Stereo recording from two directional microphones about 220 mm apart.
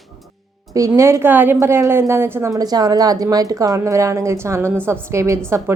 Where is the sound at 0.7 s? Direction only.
15° right (ahead or behind).